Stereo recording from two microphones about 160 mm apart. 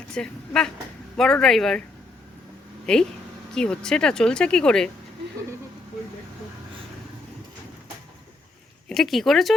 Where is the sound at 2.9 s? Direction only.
5° left (ahead or behind).